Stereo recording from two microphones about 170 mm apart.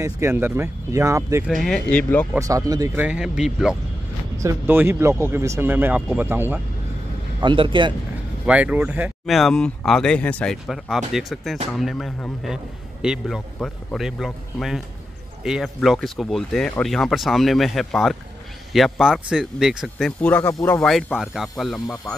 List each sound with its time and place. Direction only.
0.0 s speech: 15° right (ahead or behind)
1.6 s speech: 5° left (ahead or behind)
2.3 s speech: 20° right (ahead or behind); by 3.7 s 5° right (ahead or behind)
4.4 s speech: 15° right (ahead or behind)
7.3 s a man's voice: 30° right (ahead or behind)
8.5 s speech: 10° right (ahead or behind)
9.2 s speech: centre (ahead or behind)
20.8 s speech: centre (ahead or behind)